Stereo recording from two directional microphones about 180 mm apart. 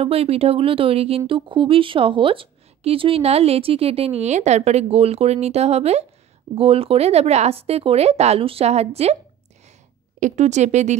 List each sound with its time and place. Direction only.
0.0 s speech: 35° right (ahead or behind)
10.2 s speech: 40° right (ahead or behind)